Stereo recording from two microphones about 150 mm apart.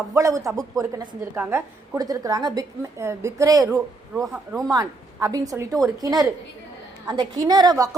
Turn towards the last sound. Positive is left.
turn(degrees=-25)  # may be behind; listen again after turning